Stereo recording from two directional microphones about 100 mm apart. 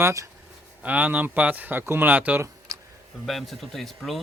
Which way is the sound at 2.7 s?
40° right (ahead or behind).